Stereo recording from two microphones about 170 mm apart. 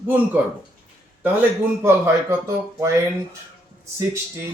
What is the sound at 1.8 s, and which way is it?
Speech, 15° right (ahead or behind).